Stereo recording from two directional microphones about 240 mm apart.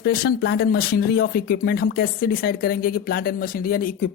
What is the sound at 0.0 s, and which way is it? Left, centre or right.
Speech, left.